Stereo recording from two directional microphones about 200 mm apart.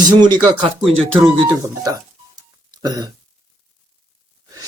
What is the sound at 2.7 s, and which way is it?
Throat clearing, 20° right (ahead or behind).